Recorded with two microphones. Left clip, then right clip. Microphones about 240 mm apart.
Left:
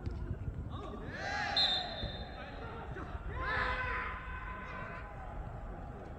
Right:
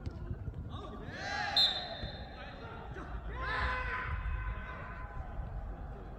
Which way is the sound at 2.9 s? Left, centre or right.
Right.